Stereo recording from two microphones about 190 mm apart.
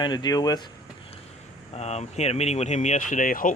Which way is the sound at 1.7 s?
35° left (ahead or behind).